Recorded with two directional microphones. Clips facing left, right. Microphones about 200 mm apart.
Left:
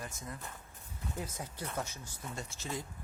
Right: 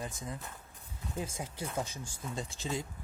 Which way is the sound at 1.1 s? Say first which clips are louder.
Right 4 dB; 30° right (ahead or behind).